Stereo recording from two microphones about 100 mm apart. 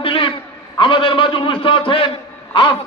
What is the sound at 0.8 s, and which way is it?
A man's voice, 60° left (ahead or behind).